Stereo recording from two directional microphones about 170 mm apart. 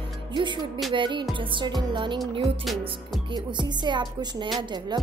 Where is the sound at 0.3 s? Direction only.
30° right (ahead or behind).